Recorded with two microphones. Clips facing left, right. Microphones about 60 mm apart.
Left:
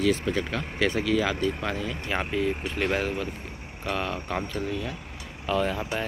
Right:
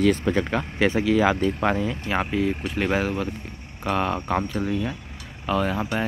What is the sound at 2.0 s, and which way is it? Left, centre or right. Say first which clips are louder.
Speech: right 2 dB; centre.